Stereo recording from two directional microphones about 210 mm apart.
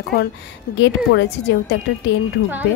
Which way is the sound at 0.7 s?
55° left (ahead or behind).